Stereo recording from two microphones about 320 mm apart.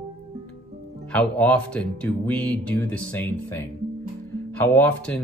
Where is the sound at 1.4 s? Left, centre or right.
Centre.